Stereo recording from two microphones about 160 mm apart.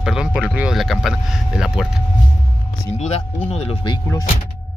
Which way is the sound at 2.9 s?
40° left (ahead or behind).